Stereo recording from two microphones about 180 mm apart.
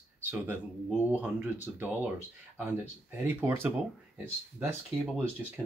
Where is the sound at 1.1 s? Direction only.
10° right (ahead or behind).